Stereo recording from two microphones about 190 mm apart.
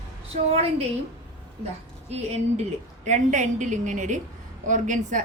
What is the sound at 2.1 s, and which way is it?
A woman's voice, 35° right (ahead or behind).